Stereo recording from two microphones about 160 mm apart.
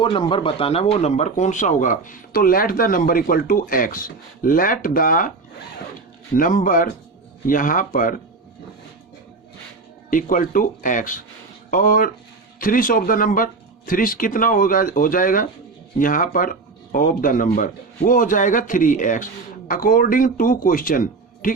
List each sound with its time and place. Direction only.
0.0 s speech: 30° left (ahead or behind); by 5.3 s 60° left (ahead or behind)
6.3 s speech: 55° left (ahead or behind)
10.1 s speech: 55° left (ahead or behind)